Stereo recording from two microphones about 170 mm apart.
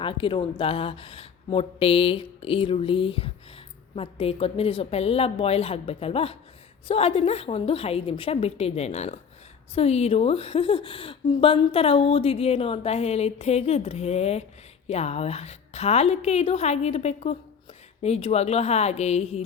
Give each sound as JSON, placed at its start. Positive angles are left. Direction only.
{"t": 0.0, "sound": "a woman's voice", "side_deg": 30}